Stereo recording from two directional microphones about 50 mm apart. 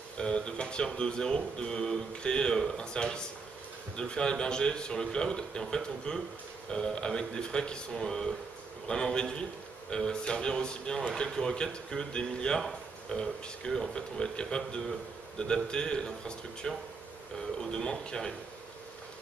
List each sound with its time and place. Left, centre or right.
0.2 s speech: centre